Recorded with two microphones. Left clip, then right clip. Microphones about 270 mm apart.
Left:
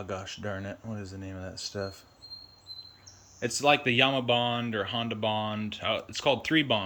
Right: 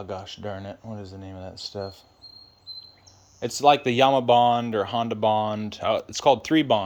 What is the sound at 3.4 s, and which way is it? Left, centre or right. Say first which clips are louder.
Speech: right 6 dB; centre.